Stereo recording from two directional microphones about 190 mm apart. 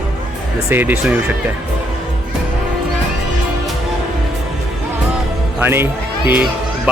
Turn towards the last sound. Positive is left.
turn(degrees=-10)  # may be behind; listen again after turning